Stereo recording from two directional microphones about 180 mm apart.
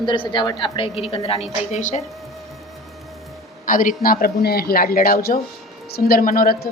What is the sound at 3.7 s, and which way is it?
A man's voice, 50° left (ahead or behind).